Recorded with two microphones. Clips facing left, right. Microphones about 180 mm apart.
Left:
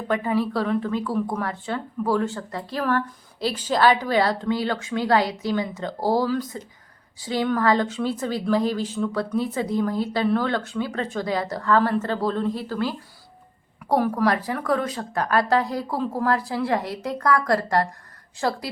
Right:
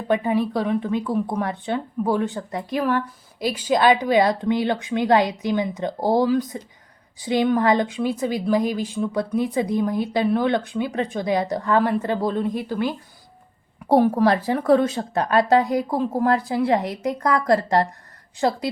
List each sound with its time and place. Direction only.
0.1 s speech: 20° right (ahead or behind)